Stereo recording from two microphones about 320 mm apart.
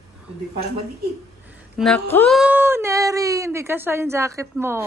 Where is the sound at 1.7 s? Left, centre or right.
Centre.